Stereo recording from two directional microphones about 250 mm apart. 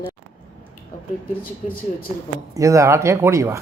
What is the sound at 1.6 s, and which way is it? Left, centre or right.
Speech, left.